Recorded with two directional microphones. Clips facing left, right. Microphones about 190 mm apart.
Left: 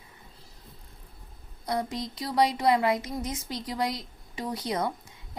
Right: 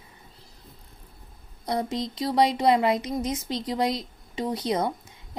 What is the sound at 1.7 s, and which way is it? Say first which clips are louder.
Speech: right 3 dB; 25° right (ahead or behind).